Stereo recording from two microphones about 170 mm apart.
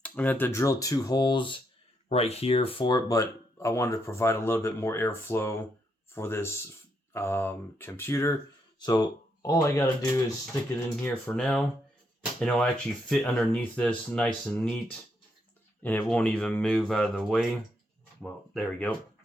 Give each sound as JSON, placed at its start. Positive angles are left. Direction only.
{"t": 0.0, "sound": "speech", "side_deg": 10}
{"t": 2.0, "sound": "speech", "side_deg": 35}